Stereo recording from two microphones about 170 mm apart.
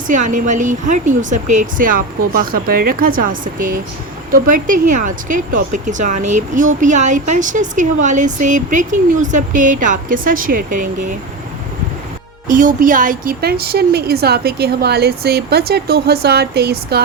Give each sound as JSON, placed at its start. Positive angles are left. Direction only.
{"t": 0.1, "sound": "speech", "side_deg": -50}
{"t": 12.5, "sound": "a woman's voice", "side_deg": -50}